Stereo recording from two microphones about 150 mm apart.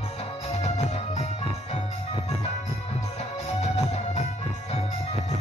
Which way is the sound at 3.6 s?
50° left (ahead or behind).